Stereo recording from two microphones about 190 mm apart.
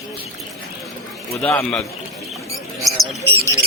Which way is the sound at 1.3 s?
15° left (ahead or behind).